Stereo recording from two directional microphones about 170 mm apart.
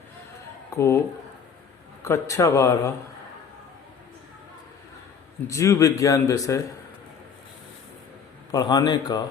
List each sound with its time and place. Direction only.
0.7 s speech: 15° left (ahead or behind)
5.5 s a man's voice: 15° left (ahead or behind)
8.5 s a man's voice: 25° left (ahead or behind)